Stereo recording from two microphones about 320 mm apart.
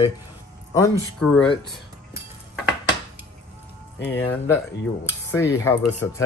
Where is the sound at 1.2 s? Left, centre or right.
Centre.